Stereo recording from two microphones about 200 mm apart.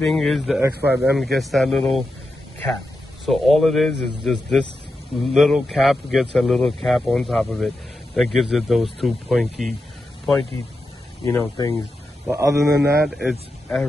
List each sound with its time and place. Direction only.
0.0 s a man's voice: centre (ahead or behind)
3.3 s a man's voice: centre (ahead or behind)
11.2 s speech: 15° left (ahead or behind)
12.3 s speech: 15° right (ahead or behind)
13.0 s a man's voice: centre (ahead or behind)